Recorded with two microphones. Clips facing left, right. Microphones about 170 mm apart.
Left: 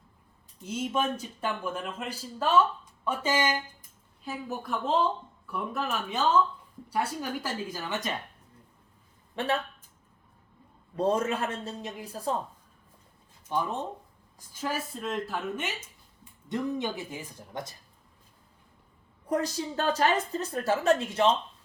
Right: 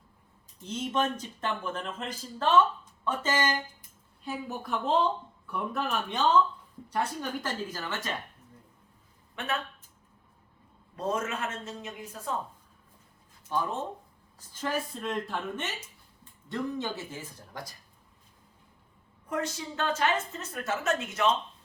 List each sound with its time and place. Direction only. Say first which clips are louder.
0.6 s speech: even; 10° left (ahead or behind)
4.2 s speech: even; centre (ahead or behind); by 8.1 s 15° left (ahead or behind)
9.3 s speech: left 5 dB; 30° left (ahead or behind)
10.9 s a woman's voice: left 5 dB; 30° left (ahead or behind)
13.5 s speech: left 1 dB; 15° left (ahead or behind)
19.3 s a woman's voice: left 4 dB; 35° left (ahead or behind)